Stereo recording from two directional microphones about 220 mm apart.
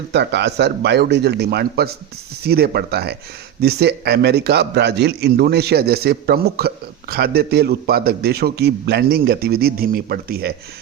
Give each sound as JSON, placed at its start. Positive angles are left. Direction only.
{"t": 0.1, "sound": "a man's voice", "side_deg": -50}